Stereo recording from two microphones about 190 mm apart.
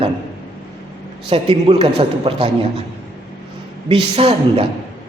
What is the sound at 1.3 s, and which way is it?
A man's voice, 30° right (ahead or behind).